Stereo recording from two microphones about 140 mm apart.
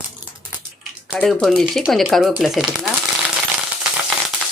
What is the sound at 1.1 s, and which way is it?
Speech, 5° left (ahead or behind).